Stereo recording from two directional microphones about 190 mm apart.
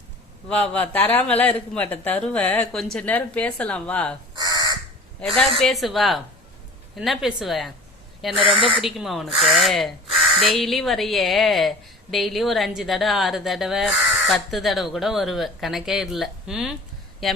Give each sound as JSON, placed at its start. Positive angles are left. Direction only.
{"t": 0.4, "sound": "speech", "side_deg": 5}
{"t": 4.4, "sound": "crow", "side_deg": -20}
{"t": 5.2, "sound": "a woman's voice", "side_deg": 0}